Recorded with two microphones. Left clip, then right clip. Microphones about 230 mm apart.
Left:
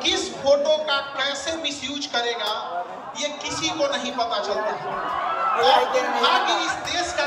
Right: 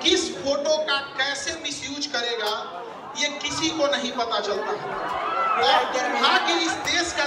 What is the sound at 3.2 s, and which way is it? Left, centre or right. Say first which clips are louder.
Speech: right 1 dB; centre.